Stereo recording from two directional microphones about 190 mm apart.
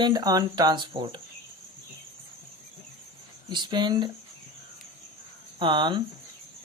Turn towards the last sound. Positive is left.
turn(degrees=-25)  # may be behind; listen again after turning